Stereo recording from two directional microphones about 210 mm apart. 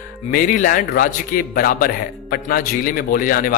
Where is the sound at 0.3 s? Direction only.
40° left (ahead or behind).